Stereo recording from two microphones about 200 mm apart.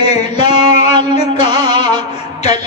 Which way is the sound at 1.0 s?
30° left (ahead or behind).